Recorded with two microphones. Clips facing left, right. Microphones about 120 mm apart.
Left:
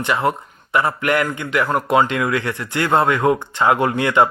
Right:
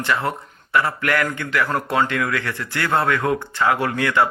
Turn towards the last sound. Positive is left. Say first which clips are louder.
# left 3 dB
turn(degrees=20)  # may be behind; listen again after turning